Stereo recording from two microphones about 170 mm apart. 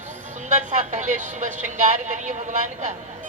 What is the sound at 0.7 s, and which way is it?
Speech, 45° right (ahead or behind).